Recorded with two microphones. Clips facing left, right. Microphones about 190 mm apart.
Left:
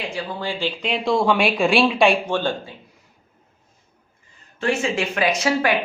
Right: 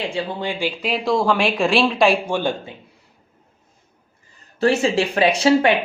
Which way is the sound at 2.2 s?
15° right (ahead or behind).